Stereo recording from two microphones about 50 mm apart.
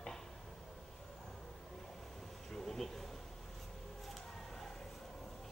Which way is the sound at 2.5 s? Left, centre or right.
Centre.